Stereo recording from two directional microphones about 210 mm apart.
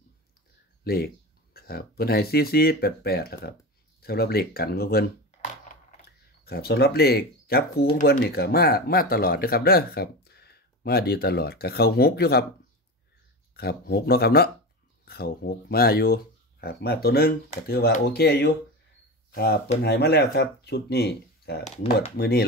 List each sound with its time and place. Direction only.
0.8 s speech: 45° left (ahead or behind)
5.7 s a sound: 45° left (ahead or behind)
7.9 s speech: 45° left (ahead or behind)
13.6 s speech: 50° left (ahead or behind)